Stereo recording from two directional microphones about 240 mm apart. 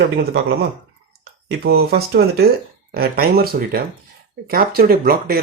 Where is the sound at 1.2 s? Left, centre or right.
Right.